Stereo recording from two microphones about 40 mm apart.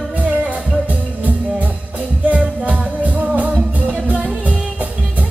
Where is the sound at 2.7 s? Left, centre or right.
Right.